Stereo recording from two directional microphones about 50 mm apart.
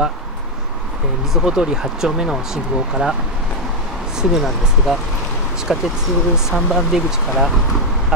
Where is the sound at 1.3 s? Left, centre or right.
Centre.